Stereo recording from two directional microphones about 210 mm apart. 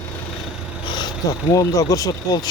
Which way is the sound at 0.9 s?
20° left (ahead or behind).